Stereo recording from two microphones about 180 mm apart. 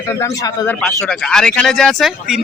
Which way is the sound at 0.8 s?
5° left (ahead or behind).